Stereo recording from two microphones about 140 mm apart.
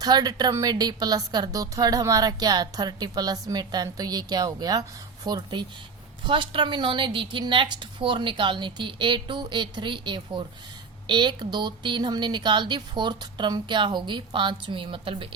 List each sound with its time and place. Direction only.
0.0 s a woman's voice: 30° right (ahead or behind)